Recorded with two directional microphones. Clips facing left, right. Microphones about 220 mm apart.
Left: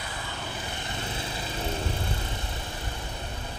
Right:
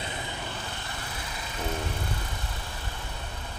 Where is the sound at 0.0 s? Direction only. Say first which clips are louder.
Right 2 dB; 20° right (ahead or behind).